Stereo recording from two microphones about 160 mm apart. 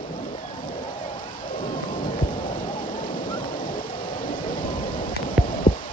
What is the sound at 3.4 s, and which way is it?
Thunder, 60° left (ahead or behind).